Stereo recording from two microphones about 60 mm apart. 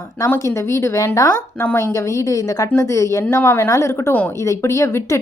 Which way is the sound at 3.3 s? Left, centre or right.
Left.